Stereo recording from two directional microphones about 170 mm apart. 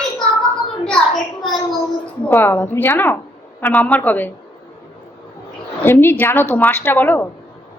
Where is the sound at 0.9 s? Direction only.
Centre (ahead or behind).